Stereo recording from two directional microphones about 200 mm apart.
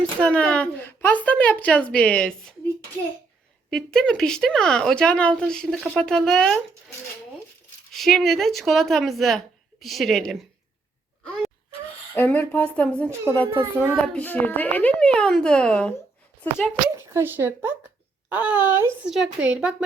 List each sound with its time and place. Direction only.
0.2 s a woman's voice: 5° left (ahead or behind)
3.7 s speech: 5° left (ahead or behind)
7.9 s speech: centre (ahead or behind)
11.2 s a sound: 5° left (ahead or behind)
12.1 s a woman's voice: 10° left (ahead or behind)
16.9 s a woman's voice: 10° right (ahead or behind)